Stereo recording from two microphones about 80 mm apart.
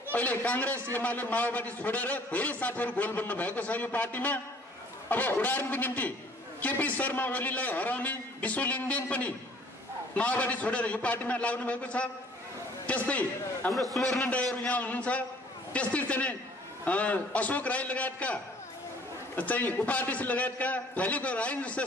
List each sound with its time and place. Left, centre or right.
0.1 s a man's voice: left
13.7 s speech: centre
14.3 s a man's voice: centre